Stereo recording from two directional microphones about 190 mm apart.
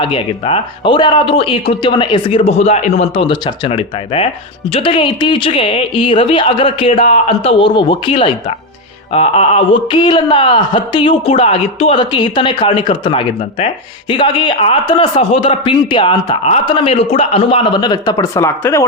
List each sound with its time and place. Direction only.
0.0 s a man's voice: 30° left (ahead or behind)